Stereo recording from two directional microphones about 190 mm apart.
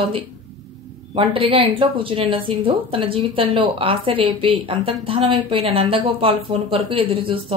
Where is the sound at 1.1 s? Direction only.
30° right (ahead or behind).